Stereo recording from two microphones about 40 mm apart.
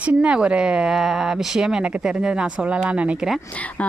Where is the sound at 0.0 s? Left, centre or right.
Right.